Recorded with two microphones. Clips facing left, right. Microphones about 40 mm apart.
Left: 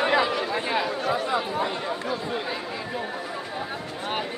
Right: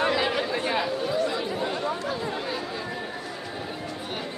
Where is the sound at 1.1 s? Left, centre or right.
Left.